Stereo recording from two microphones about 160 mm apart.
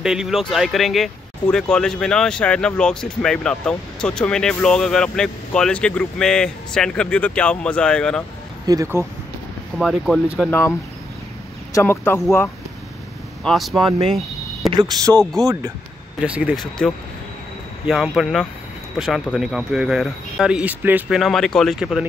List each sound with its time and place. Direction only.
0.0 s speech: 5° right (ahead or behind)
8.6 s speech: 20° right (ahead or behind)
9.8 s speech: centre (ahead or behind)
10.5 s speech: 15° left (ahead or behind)
13.4 s speech: centre (ahead or behind)
14.0 s a sound: centre (ahead or behind)
14.7 s speech: 25° right (ahead or behind)
16.2 s speech: 10° right (ahead or behind)
17.8 s speech: centre (ahead or behind)
21.2 s speech: centre (ahead or behind)